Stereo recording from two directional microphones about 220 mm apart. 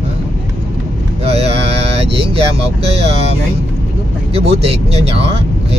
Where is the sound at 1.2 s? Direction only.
25° right (ahead or behind).